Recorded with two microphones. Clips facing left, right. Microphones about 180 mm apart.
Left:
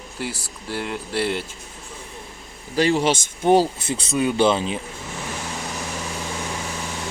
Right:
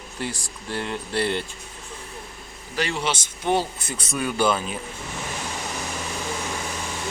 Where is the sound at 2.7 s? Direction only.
40° left (ahead or behind).